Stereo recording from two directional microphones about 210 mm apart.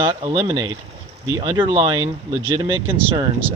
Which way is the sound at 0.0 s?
25° right (ahead or behind).